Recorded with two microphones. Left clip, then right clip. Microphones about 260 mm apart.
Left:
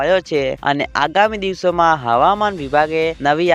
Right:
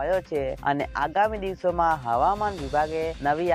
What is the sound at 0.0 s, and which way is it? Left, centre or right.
Speech, left.